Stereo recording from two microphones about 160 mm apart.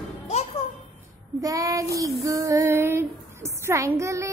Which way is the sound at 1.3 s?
20° right (ahead or behind).